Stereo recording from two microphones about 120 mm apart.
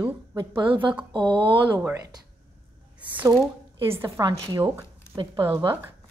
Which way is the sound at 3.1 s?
15° right (ahead or behind).